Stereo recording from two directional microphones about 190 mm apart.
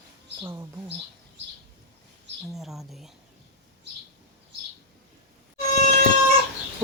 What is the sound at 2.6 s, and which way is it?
Speech, centre (ahead or behind).